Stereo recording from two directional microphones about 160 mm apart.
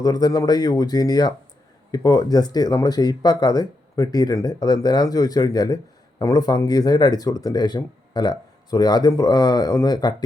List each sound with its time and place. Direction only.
0.0 s speech: 25° left (ahead or behind)